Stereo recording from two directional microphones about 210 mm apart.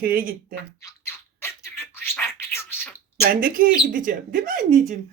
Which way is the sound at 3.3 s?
40° right (ahead or behind).